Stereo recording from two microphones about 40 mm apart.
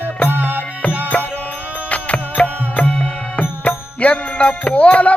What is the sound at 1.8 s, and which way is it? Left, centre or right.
Music, left.